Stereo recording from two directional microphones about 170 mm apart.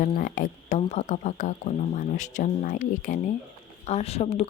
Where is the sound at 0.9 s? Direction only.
45° left (ahead or behind).